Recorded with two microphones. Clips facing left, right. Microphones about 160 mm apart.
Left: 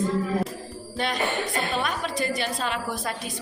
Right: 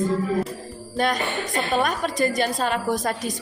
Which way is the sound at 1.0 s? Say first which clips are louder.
Right 3 dB; 40° right (ahead or behind).